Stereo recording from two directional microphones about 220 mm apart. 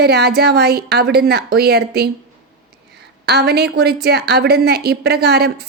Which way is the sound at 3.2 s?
50° right (ahead or behind).